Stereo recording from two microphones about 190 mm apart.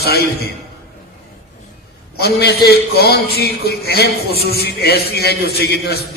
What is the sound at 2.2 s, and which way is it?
A man's voice, 55° left (ahead or behind).